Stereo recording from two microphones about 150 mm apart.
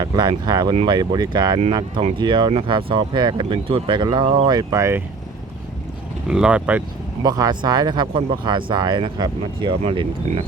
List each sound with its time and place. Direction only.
0.0 s speech: 30° right (ahead or behind)
2.0 s speech: 45° right (ahead or behind)
2.2 s speech: 30° right (ahead or behind)
6.2 s speech: 5° right (ahead or behind)
7.2 s speech: 25° right (ahead or behind)